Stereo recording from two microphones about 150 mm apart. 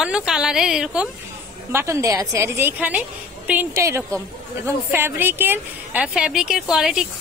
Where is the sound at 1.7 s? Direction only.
15° right (ahead or behind).